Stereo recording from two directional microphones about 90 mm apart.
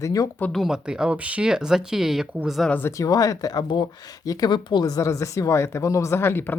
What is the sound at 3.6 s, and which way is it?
Speech, 60° left (ahead or behind).